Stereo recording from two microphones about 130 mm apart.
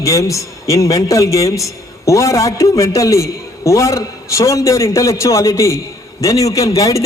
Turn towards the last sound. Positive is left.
turn(degrees=25)  # may be behind; listen again after turning